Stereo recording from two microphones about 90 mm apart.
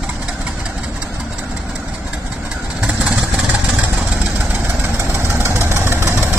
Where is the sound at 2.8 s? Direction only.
15° right (ahead or behind).